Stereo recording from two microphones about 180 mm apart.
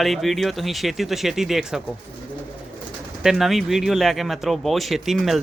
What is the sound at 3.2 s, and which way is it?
Speech, centre (ahead or behind).